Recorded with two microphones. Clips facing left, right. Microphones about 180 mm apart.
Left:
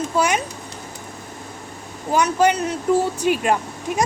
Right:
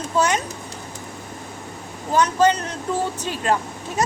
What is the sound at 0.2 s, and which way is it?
Speech, 10° left (ahead or behind).